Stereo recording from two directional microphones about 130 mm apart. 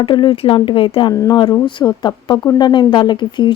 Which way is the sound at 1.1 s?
25° left (ahead or behind).